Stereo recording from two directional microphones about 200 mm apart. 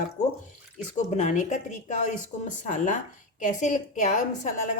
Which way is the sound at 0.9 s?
35° left (ahead or behind).